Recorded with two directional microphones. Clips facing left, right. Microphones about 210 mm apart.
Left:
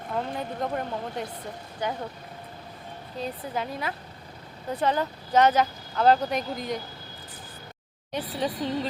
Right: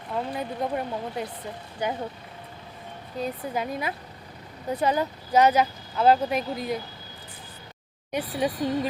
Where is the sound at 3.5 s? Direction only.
15° right (ahead or behind).